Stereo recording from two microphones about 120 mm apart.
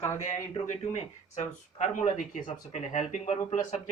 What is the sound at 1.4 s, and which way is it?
Speech, 90° left.